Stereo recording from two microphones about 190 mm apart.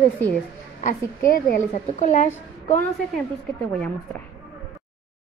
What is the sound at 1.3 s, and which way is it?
A woman's voice, 45° left (ahead or behind).